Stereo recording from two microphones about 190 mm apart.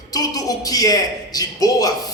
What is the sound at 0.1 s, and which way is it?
A man's voice, 20° left (ahead or behind).